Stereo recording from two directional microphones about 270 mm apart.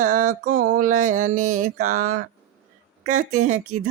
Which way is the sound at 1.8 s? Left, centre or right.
Right.